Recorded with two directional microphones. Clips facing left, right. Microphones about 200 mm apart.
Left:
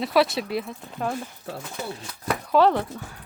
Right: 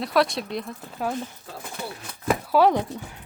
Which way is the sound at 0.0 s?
5° left (ahead or behind).